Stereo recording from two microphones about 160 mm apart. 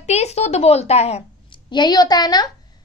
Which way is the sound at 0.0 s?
45° left (ahead or behind).